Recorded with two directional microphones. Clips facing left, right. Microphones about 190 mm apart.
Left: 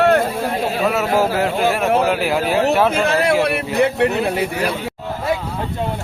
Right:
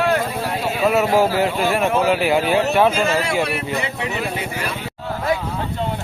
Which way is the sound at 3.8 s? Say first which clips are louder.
Left 8 dB; 60° left (ahead or behind).